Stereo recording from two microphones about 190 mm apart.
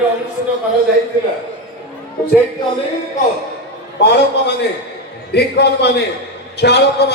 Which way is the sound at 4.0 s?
60° left (ahead or behind).